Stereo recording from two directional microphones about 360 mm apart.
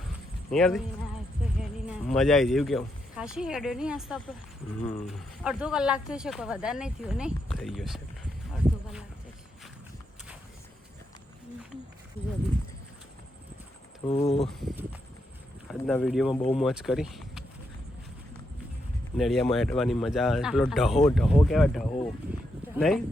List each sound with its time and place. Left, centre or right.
0.5 s speech: centre
1.9 s speech: centre
14.0 s speech: centre
14.4 s speech: centre
19.1 s speech: centre